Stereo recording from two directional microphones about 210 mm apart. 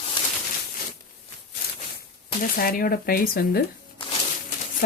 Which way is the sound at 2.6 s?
45° left (ahead or behind).